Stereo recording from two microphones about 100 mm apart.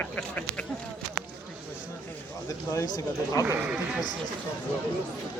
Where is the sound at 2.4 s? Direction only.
35° left (ahead or behind).